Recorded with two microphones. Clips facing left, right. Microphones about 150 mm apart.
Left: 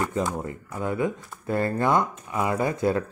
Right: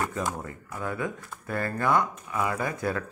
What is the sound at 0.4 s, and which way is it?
Speech, 25° left (ahead or behind).